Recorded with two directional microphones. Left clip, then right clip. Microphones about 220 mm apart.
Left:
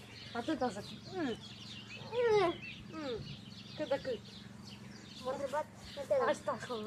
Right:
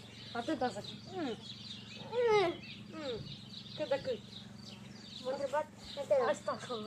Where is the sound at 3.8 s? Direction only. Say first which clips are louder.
Right 1 dB; 30° left (ahead or behind).